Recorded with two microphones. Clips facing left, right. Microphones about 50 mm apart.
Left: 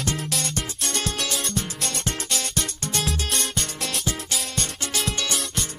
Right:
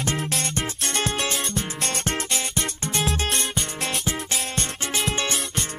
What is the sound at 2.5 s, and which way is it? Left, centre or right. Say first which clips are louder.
Music: right 1 dB; centre.